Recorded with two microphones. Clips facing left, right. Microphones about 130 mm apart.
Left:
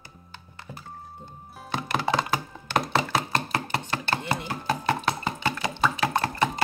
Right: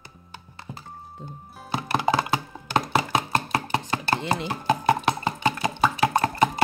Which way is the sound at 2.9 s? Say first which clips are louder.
Right 2 dB; 15° right (ahead or behind).